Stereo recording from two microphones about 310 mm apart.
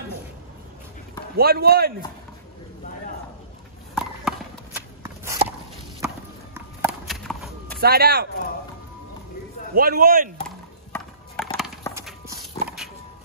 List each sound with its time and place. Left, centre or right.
1.3 s speech: right
3.9 s a sound: centre
5.0 s walk: centre
5.9 s horse: centre
7.8 s speech: right
9.8 s speech: right
10.9 s a sound: centre